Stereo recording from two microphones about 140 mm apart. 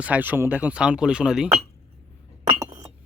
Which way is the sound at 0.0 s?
10° right (ahead or behind).